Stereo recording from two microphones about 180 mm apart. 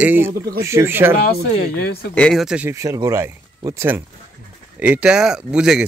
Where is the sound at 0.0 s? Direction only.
10° right (ahead or behind).